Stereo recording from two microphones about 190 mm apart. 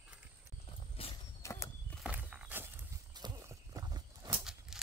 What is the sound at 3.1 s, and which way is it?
Horse, 20° right (ahead or behind).